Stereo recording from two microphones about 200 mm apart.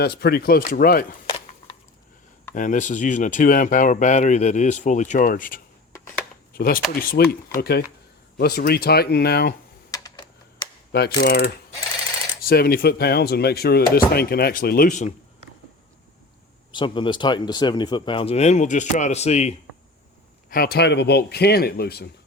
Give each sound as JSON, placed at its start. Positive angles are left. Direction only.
{"t": 0.0, "sound": "speech", "side_deg": 55}
{"t": 2.6, "sound": "speech", "side_deg": 40}
{"t": 9.9, "sound": "computer keyboard", "side_deg": 20}
{"t": 11.2, "sound": "speech", "side_deg": 50}
{"t": 16.7, "sound": "speech", "side_deg": 25}
{"t": 20.5, "sound": "speech", "side_deg": 50}